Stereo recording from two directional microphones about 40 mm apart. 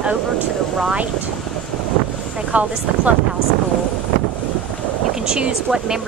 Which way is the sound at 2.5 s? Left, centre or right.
Right.